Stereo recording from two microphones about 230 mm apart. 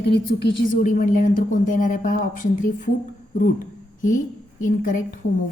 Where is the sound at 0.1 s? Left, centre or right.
Left.